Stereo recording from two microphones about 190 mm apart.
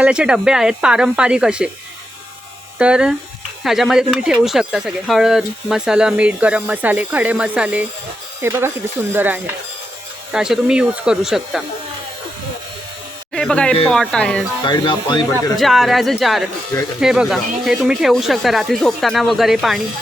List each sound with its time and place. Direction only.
0.0 s speech: 5° right (ahead or behind)
2.7 s speech: 5° right (ahead or behind)
13.3 s speech: 5° left (ahead or behind)
14.6 s speech: 25° left (ahead or behind)
15.5 s speech: centre (ahead or behind)